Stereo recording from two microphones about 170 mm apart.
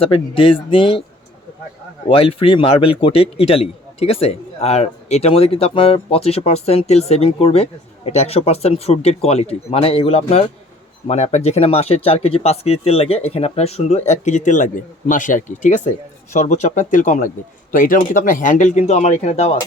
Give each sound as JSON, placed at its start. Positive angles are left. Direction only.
{"t": 0.0, "sound": "a man's voice", "side_deg": 30}
{"t": 2.0, "sound": "a man's voice", "side_deg": 30}